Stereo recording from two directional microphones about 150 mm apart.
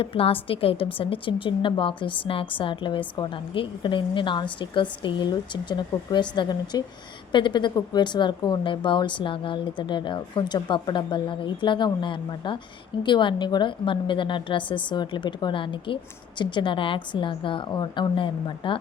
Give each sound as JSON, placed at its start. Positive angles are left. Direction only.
{"t": 0.0, "sound": "speech", "side_deg": 40}